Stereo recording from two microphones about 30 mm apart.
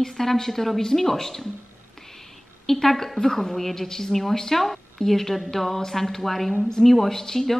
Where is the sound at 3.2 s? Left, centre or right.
Centre.